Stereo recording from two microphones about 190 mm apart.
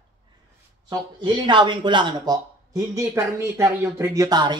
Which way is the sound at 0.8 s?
25° right (ahead or behind).